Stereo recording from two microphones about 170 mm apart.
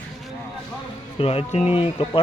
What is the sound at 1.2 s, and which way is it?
Speech, 35° left (ahead or behind).